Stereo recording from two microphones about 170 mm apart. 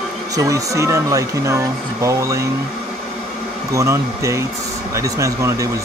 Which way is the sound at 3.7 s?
15° right (ahead or behind).